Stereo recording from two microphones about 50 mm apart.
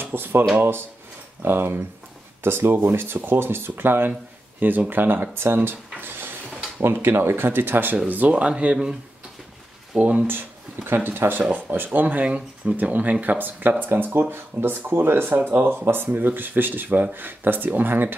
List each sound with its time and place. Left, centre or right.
0.0 s speech: right
5.9 s a sound: right
6.8 s speech: right
8.3 s speech: right
9.9 s speech: right
10.2 s speech: right